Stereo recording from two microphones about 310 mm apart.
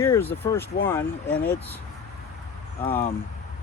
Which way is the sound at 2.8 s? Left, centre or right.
Centre.